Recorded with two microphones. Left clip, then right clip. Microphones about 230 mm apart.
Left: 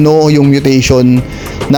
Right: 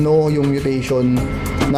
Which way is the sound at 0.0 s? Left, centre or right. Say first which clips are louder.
Left 8 dB; left.